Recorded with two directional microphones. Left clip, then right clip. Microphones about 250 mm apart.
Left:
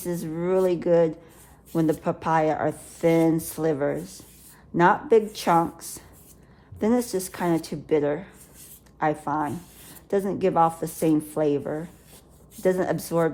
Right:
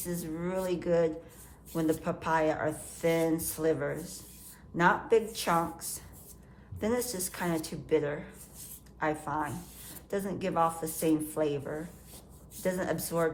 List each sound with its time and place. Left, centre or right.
0.0 s speech: left